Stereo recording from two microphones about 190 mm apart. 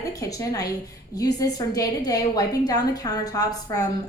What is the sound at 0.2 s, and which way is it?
A woman's voice, 15° left (ahead or behind).